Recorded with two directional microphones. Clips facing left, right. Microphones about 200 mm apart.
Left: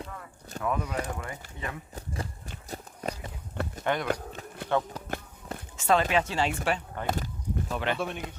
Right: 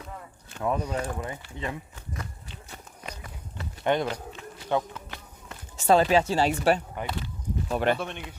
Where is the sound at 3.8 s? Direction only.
20° right (ahead or behind).